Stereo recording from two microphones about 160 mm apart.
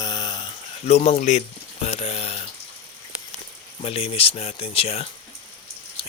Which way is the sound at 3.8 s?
35° left (ahead or behind).